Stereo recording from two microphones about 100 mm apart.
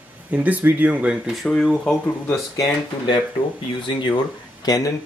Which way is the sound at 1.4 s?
5° left (ahead or behind).